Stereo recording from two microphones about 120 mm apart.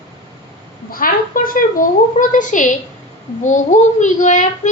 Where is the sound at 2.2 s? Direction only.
90° left.